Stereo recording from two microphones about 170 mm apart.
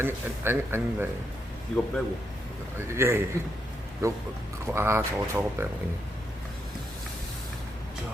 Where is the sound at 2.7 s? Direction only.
15° right (ahead or behind).